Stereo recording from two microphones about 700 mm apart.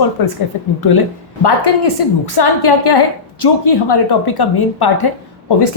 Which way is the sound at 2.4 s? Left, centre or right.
Left.